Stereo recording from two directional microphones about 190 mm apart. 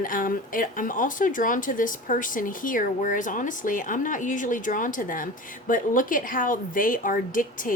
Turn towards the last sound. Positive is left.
turn(degrees=45)  # may be behind; listen again after turning